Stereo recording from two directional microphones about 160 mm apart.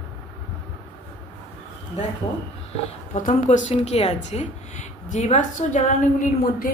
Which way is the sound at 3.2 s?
55° left (ahead or behind).